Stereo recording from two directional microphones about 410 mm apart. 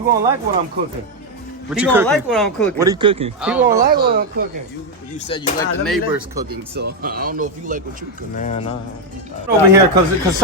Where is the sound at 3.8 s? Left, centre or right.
Right.